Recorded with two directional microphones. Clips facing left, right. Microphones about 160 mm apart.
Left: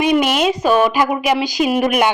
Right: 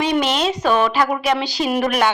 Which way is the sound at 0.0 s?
10° left (ahead or behind).